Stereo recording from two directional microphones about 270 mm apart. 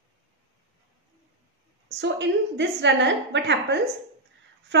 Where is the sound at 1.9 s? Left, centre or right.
Right.